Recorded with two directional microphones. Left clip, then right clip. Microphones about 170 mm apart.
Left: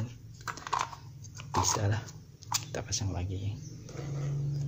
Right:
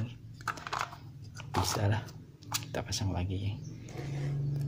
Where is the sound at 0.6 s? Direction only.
5° left (ahead or behind).